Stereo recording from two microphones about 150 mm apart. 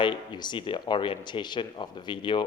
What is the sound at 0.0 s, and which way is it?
Speech, 30° left (ahead or behind).